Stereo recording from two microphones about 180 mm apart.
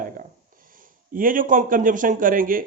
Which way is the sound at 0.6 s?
50° right (ahead or behind).